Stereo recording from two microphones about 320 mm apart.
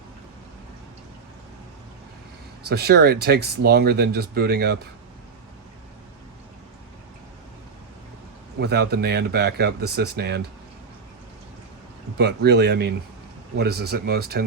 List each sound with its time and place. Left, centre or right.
2.6 s speech: right
8.5 s speech: right
12.1 s speech: right